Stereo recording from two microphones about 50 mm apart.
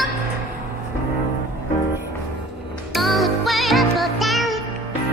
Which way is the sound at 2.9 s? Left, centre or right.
Centre.